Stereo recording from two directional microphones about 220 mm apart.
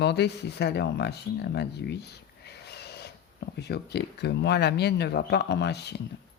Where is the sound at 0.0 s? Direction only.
50° left (ahead or behind).